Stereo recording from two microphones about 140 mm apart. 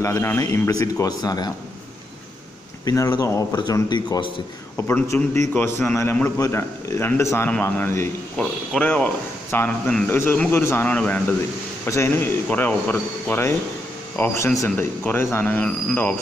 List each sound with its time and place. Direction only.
0.0 s a man's voice: 20° left (ahead or behind)
2.8 s a man's voice: 25° left (ahead or behind)
4.7 s a man's voice: 15° left (ahead or behind)